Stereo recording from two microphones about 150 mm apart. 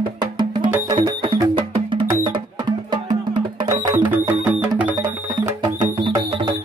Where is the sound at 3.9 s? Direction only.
10° right (ahead or behind).